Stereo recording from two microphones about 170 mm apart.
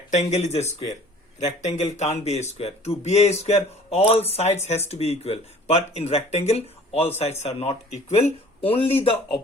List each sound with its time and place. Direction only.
0.1 s speech: 40° left (ahead or behind)